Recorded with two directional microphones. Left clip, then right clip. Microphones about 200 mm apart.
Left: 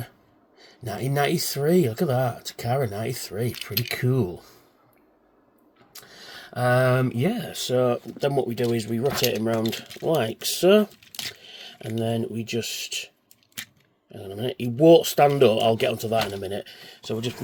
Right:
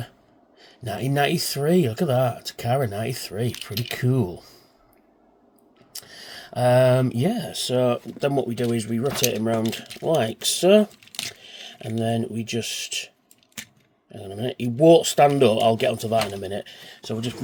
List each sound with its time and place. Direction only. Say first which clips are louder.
0.6 s speech: right 2 dB; 5° right (ahead or behind)
5.9 s speech: right 3 dB; 10° right (ahead or behind)
14.1 s speech: even; 5° right (ahead or behind)